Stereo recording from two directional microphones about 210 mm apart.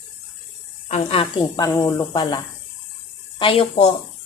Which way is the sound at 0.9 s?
30° left (ahead or behind).